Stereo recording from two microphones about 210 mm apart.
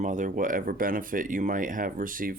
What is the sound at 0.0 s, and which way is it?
Speech, 35° right (ahead or behind).